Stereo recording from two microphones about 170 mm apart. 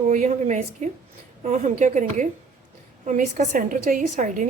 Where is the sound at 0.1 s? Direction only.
45° right (ahead or behind).